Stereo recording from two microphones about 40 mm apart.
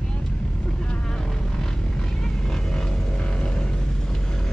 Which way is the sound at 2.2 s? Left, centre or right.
Centre.